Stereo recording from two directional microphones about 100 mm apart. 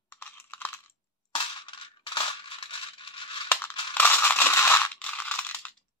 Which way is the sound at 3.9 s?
20° left (ahead or behind).